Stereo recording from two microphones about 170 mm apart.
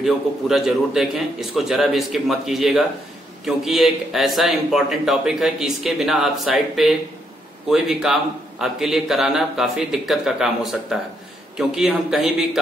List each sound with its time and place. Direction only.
0.0 s a man's voice: centre (ahead or behind)